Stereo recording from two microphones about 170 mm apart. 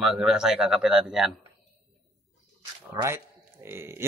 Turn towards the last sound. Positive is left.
turn(degrees=-15)  # may be behind; listen again after turning